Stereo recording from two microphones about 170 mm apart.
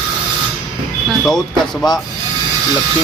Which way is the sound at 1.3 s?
5° left (ahead or behind).